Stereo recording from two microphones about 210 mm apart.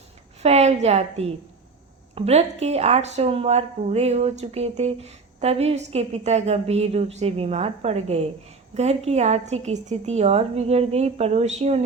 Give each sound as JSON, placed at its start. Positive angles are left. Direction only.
{"t": 0.4, "sound": "speech", "side_deg": -30}